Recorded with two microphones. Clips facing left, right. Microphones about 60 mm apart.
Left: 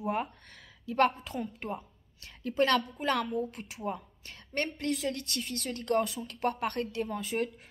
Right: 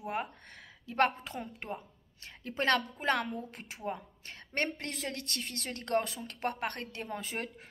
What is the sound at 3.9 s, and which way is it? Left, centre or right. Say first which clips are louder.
Speech: left 1 dB; centre.